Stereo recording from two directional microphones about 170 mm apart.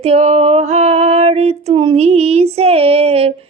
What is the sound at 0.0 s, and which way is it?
Female singing, 40° right (ahead or behind).